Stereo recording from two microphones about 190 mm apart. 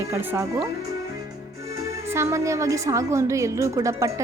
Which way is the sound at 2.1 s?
15° right (ahead or behind).